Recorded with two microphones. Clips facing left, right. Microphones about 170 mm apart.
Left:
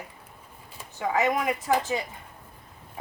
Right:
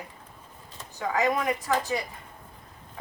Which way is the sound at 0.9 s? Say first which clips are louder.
Left 1 dB; 20° left (ahead or behind).